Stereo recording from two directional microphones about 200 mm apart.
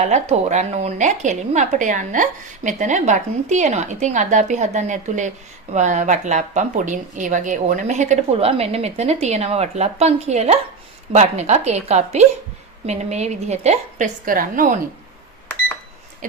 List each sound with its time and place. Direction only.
0.0 s speech: 35° right (ahead or behind)